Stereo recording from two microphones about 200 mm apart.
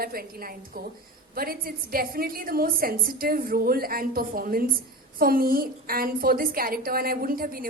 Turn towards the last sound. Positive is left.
turn(degrees=-45)  # may be behind; listen again after turning